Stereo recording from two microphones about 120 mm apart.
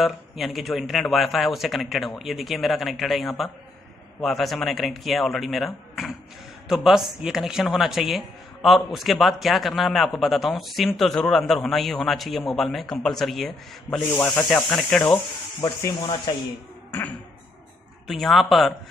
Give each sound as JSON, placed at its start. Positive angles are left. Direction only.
{"t": 0.0, "sound": "a man's voice", "side_deg": 0}
{"t": 15.6, "sound": "speech", "side_deg": 25}
{"t": 18.0, "sound": "a man's voice", "side_deg": 0}